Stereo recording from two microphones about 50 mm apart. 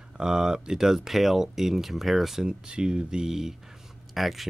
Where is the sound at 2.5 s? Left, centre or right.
Centre.